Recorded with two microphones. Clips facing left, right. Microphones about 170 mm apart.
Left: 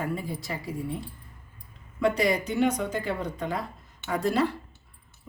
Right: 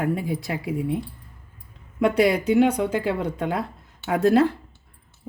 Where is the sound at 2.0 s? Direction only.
60° right (ahead or behind).